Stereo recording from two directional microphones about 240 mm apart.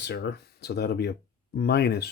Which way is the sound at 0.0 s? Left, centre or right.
Left.